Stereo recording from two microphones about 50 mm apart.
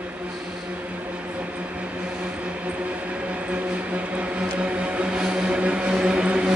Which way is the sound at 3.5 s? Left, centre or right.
Right.